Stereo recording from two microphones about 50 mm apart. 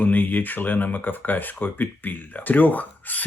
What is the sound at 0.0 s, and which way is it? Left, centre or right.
Speech, left.